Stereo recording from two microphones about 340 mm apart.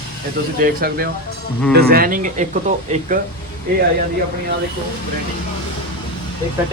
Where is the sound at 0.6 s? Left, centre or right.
Right.